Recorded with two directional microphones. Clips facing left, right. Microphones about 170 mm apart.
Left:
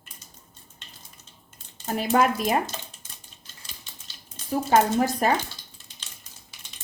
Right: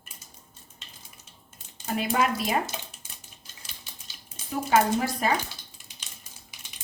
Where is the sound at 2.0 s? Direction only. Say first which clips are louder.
Left 4 dB; 50° left (ahead or behind).